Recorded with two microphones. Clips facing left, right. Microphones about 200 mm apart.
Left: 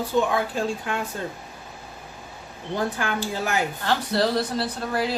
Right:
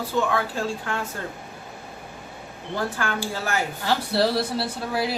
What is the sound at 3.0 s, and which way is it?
Speech, 15° left (ahead or behind).